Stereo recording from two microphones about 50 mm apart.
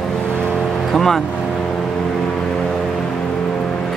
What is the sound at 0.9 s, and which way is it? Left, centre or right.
Speech, centre.